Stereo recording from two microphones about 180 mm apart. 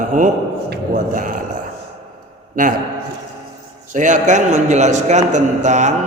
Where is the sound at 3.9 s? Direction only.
45° right (ahead or behind).